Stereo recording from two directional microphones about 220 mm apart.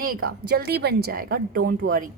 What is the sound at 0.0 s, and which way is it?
A woman's voice, 40° right (ahead or behind).